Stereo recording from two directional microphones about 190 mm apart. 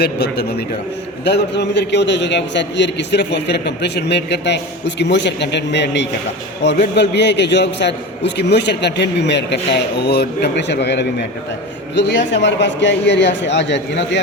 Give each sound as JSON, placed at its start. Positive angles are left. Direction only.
{"t": 0.0, "sound": "a man's voice", "side_deg": 60}